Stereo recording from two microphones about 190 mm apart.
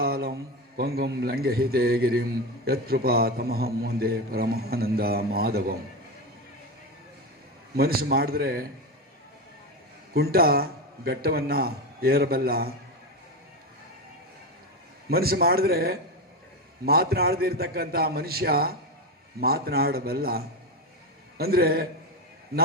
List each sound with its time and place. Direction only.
0.0 s mantra: 55° right (ahead or behind)
0.8 s a man's voice: 55° right (ahead or behind)
7.8 s a man's voice: 55° right (ahead or behind)
10.2 s a man's voice: 55° right (ahead or behind)
15.1 s a man's voice: 55° right (ahead or behind)